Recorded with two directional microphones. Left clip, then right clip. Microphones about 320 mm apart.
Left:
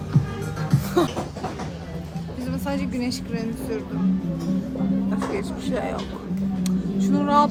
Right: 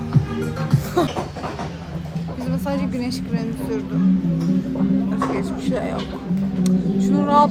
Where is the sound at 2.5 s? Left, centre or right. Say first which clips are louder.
Right 3 dB; centre.